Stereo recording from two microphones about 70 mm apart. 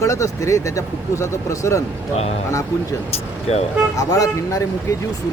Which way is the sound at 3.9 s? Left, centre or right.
Left.